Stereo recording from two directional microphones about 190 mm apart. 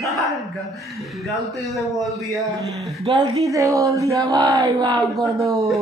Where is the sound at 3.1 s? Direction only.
15° right (ahead or behind).